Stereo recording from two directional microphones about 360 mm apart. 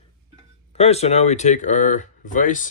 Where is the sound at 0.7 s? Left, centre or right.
Centre.